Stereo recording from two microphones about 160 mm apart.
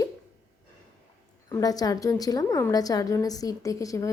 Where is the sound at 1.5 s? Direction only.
25° left (ahead or behind).